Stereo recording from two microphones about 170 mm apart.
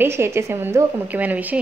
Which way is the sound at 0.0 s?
15° right (ahead or behind).